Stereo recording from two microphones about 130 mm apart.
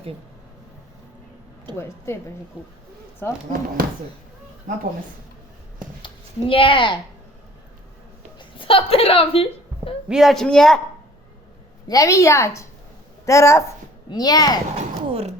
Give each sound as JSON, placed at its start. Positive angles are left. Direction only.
{"t": 4.7, "sound": "speech", "side_deg": -90}
{"t": 6.5, "sound": "speech", "side_deg": 40}
{"t": 8.4, "sound": "a sound", "side_deg": 40}
{"t": 10.1, "sound": "speech", "side_deg": 0}
{"t": 11.9, "sound": "a woman's voice", "side_deg": 25}
{"t": 14.8, "sound": "a sound", "side_deg": -55}